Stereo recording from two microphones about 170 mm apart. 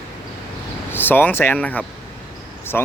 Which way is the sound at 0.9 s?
10° left (ahead or behind).